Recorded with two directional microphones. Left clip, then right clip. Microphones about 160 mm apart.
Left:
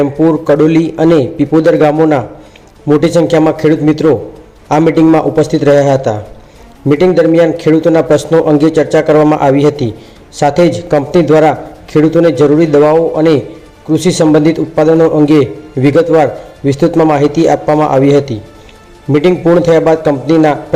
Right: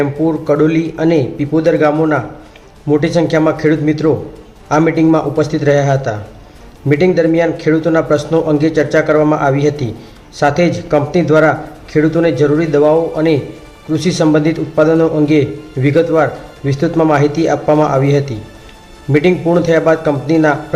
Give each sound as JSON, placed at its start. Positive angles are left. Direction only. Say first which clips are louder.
{"t": 0.0, "sound": "a man's voice", "louder": "left 5 dB", "side_deg": 30}